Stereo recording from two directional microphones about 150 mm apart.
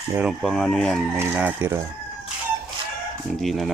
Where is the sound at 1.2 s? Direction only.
15° right (ahead or behind).